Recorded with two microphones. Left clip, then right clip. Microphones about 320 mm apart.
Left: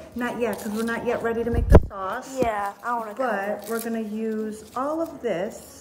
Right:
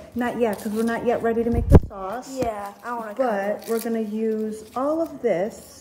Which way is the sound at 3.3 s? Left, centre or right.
Centre.